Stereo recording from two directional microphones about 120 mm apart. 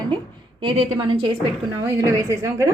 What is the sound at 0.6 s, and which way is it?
Speech, 45° right (ahead or behind).